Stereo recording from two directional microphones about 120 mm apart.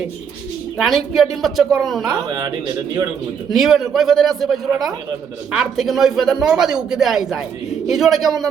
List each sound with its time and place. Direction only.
0.8 s speech: centre (ahead or behind)
3.5 s speech: centre (ahead or behind)